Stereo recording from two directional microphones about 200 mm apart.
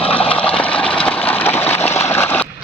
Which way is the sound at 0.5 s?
5° left (ahead or behind).